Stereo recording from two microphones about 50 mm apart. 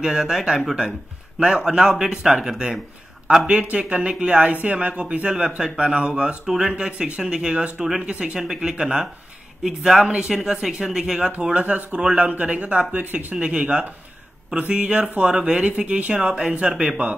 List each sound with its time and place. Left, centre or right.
0.0 s speech: centre
3.6 s speech: right
4.5 s speech: right; by 11.3 s centre
11.5 s speech: right
13.4 s speech: right